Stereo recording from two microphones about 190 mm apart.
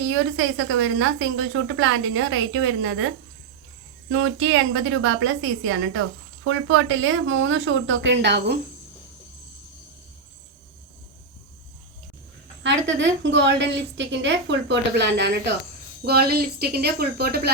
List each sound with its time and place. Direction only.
0.1 s a woman's voice: 90° right
4.1 s a woman's voice: 90° right; by 8.5 s 65° right (ahead or behind)
12.6 s a woman's voice: 75° right (ahead or behind); by 17.5 s 55° right (ahead or behind)